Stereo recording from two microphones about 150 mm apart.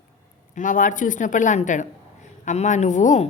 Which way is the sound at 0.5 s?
60° left (ahead or behind).